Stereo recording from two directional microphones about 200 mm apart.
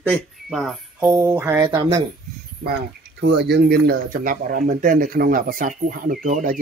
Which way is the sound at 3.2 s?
55° right (ahead or behind).